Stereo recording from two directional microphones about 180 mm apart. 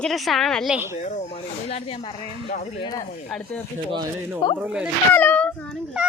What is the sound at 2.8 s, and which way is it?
Speech, 20° left (ahead or behind).